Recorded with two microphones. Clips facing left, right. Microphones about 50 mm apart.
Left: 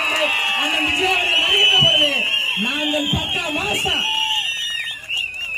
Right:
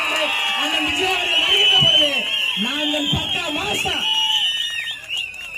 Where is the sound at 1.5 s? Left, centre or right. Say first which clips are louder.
Even; left.